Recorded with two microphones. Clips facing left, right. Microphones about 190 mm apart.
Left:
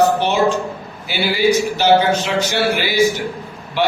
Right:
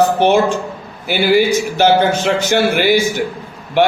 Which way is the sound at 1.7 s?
50° right (ahead or behind).